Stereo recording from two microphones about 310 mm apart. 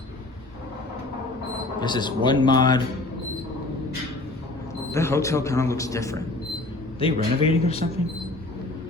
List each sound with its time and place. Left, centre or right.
1.8 s speech: centre
4.9 s a man's voice: centre